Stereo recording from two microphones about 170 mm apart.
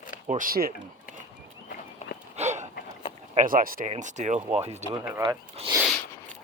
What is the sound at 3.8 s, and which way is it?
Speech, 45° right (ahead or behind).